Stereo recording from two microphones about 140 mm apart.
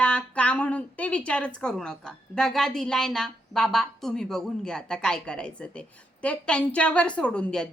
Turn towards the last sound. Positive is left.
turn(degrees=5)  # may be behind; listen again after turning